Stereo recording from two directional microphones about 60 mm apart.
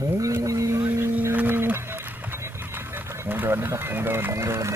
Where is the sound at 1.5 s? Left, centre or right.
Right.